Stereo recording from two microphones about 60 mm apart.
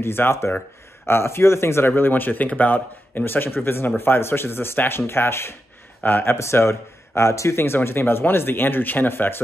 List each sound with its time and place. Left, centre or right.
0.0 s speech: left
6.3 s speech: left